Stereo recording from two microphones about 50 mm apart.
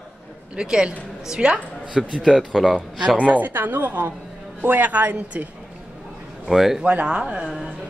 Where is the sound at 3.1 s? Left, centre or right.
Right.